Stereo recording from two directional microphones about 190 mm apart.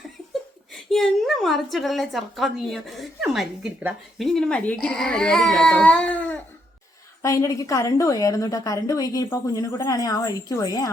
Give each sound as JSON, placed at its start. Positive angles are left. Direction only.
{"t": 0.7, "sound": "a woman's voice", "side_deg": 0}